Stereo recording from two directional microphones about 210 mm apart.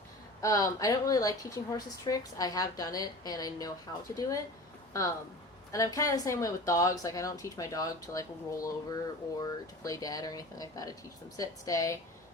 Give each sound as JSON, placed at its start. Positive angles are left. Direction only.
{"t": 0.4, "sound": "a woman's voice", "side_deg": 15}
{"t": 5.7, "sound": "a woman's voice", "side_deg": 15}